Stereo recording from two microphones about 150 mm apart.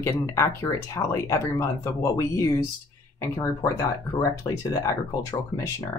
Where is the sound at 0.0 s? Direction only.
20° left (ahead or behind).